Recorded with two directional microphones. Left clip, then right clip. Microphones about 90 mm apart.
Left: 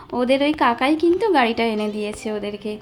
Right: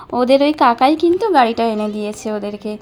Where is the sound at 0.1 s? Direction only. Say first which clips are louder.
Right 6 dB; 50° right (ahead or behind).